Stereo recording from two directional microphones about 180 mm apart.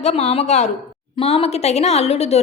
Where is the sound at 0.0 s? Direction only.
35° left (ahead or behind).